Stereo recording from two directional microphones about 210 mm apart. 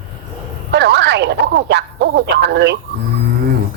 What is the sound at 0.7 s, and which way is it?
Speech, 55° right (ahead or behind).